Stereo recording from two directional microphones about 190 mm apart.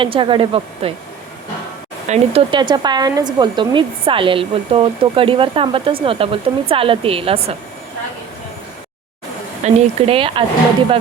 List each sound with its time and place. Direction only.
0.0 s a woman's voice: 25° right (ahead or behind)
2.0 s a woman's voice: 30° right (ahead or behind)
9.6 s a woman's voice: 30° right (ahead or behind)